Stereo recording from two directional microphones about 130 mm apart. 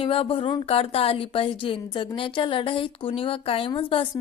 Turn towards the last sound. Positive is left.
turn(degrees=40)  # may be behind; listen again after turning